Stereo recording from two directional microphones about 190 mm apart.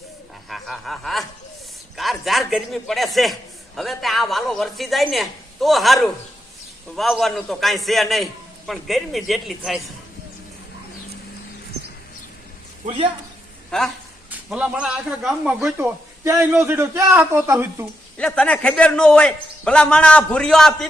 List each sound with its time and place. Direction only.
0.5 s a man's voice: centre (ahead or behind)
12.8 s speech: 30° right (ahead or behind)
13.7 s a man's voice: 5° left (ahead or behind); by 17.8 s 15° right (ahead or behind)
18.2 s a man's voice: 5° left (ahead or behind)